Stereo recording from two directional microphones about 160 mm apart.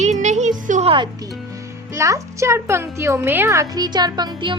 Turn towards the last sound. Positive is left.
turn(degrees=-30)  # may be behind; listen again after turning